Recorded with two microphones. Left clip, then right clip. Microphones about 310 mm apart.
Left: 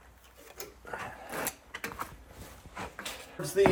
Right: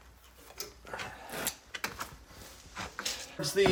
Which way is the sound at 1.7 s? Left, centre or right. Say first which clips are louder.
Even; centre.